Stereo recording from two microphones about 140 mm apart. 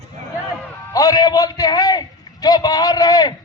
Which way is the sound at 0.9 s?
25° left (ahead or behind).